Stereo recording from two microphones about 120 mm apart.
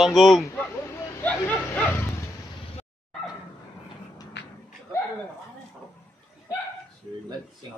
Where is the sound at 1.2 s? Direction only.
15° left (ahead or behind).